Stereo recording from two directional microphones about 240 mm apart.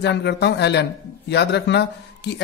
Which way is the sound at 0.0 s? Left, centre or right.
Left.